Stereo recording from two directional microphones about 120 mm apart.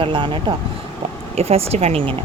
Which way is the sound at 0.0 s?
45° right (ahead or behind).